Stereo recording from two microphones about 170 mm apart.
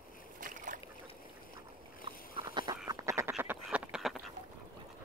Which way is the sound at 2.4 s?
20° right (ahead or behind).